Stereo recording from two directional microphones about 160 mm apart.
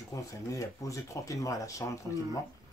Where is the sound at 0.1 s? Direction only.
20° left (ahead or behind).